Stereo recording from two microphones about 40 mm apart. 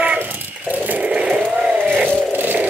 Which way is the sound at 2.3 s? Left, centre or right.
Right.